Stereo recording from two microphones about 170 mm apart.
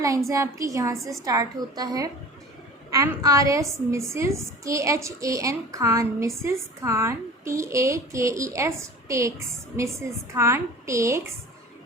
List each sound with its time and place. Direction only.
0.3 s a woman's voice: 20° right (ahead or behind)
10.3 s a woman's voice: 15° right (ahead or behind)